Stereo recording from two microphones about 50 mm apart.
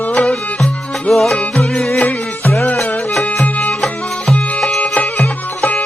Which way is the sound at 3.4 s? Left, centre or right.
Left.